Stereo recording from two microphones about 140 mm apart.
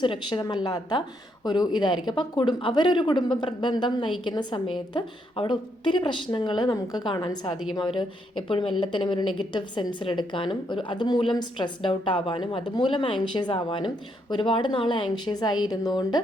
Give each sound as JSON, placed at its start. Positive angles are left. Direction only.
{"t": 0.0, "sound": "a woman's voice", "side_deg": 35}